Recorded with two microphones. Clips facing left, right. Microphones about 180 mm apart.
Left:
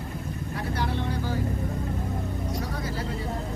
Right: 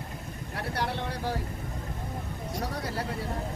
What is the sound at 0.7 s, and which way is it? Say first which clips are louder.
Vehicle: left 2 dB; 70° right (ahead or behind).